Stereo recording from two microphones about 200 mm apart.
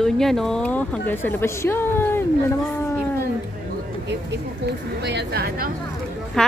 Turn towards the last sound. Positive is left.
turn(degrees=5)  # may be behind; listen again after turning